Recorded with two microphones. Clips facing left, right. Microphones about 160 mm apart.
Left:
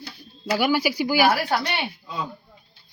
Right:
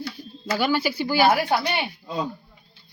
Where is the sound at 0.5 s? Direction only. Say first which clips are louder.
Left 1 dB; 10° left (ahead or behind).